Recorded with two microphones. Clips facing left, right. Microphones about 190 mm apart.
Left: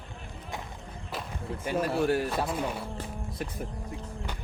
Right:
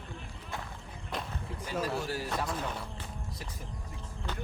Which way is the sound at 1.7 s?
60° left (ahead or behind).